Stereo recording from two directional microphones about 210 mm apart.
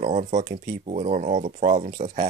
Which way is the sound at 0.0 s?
35° right (ahead or behind).